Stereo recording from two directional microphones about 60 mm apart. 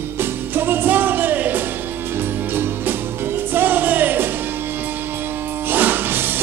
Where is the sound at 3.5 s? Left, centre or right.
Right.